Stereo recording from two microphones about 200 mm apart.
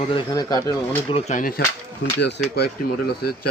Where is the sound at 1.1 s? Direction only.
35° left (ahead or behind); by 3.2 s 50° left (ahead or behind).